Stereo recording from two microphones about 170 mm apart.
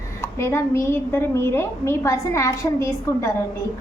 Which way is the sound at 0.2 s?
15° left (ahead or behind).